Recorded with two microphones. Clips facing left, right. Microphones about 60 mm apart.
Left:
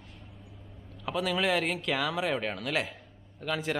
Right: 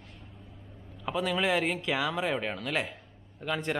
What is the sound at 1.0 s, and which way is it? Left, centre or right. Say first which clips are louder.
Speech: even; centre.